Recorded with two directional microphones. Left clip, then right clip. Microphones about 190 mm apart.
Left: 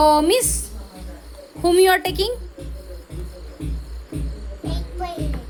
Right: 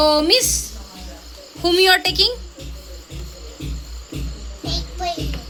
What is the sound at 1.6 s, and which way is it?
Music, 10° left (ahead or behind).